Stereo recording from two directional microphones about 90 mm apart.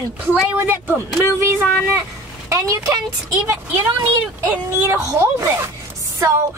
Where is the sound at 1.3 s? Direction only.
30° right (ahead or behind).